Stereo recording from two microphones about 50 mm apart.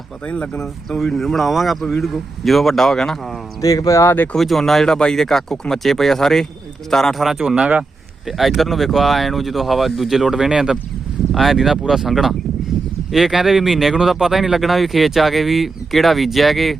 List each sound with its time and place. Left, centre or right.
0.3 s speech: left
0.9 s speech: centre
3.9 s speech: left
4.4 s speech: centre
7.2 s speech: centre
7.4 s speech: centre
8.3 s speech: centre
11.3 s speech: centre